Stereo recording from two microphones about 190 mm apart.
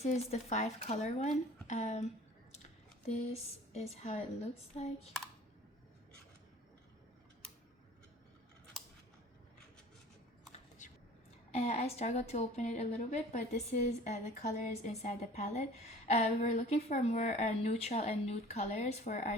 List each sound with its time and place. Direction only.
0.0 s a woman's voice: 35° left (ahead or behind)
3.1 s a woman's voice: 35° left (ahead or behind)
10.8 s a sound: 40° left (ahead or behind)
11.5 s a woman's voice: 35° left (ahead or behind)